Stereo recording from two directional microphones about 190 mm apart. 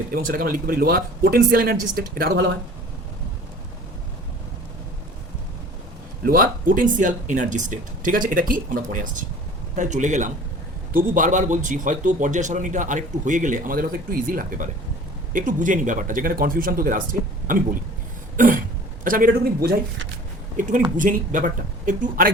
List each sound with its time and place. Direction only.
0.1 s speech: 50° right (ahead or behind)
6.2 s a man's voice: 50° right (ahead or behind)
20.6 s speech: 40° right (ahead or behind)